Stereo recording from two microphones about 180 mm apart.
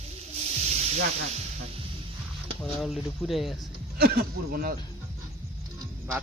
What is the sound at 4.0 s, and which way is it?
Speech, 60° right (ahead or behind).